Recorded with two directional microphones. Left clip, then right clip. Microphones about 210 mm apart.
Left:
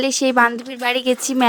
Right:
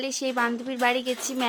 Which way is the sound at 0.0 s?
45° left (ahead or behind).